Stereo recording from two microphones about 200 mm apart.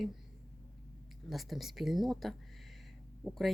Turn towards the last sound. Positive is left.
turn(degrees=0)  # may be behind; listen again after turning